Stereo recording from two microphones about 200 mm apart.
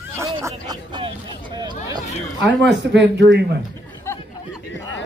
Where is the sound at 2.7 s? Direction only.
60° right (ahead or behind).